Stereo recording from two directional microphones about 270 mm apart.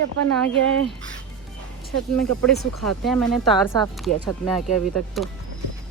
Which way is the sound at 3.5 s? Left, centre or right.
Centre.